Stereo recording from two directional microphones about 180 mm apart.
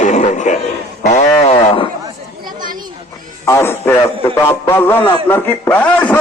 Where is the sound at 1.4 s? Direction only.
30° left (ahead or behind).